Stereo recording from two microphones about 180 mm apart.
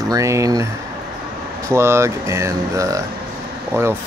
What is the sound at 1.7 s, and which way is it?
Speech, 15° right (ahead or behind).